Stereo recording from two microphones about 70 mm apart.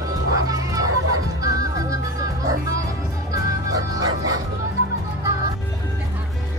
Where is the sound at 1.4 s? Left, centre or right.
Right.